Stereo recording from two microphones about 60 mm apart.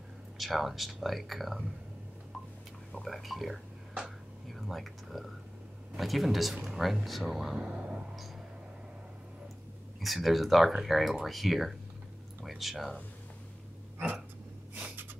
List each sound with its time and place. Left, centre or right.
0.4 s speech: centre
3.0 s speech: centre
7.5 s speech: centre
9.9 s speech: centre